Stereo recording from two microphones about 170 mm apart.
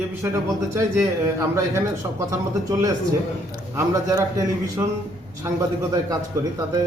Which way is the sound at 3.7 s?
20° right (ahead or behind).